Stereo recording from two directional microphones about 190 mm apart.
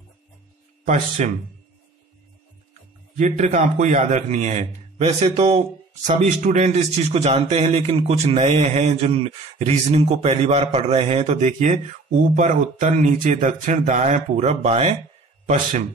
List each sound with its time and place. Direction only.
0.8 s a man's voice: 40° right (ahead or behind)
3.2 s a man's voice: 35° right (ahead or behind)